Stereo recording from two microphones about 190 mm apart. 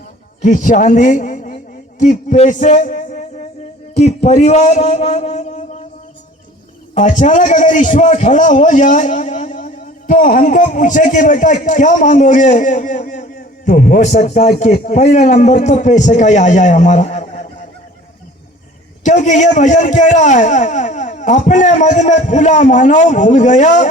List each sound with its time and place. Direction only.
0.4 s a man's voice: 45° left (ahead or behind)
6.9 s a man's voice: 40° left (ahead or behind)
19.0 s a man's voice: 40° left (ahead or behind)